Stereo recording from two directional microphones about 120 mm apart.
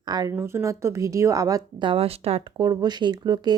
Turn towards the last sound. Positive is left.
turn(degrees=-35)  # may be behind; listen again after turning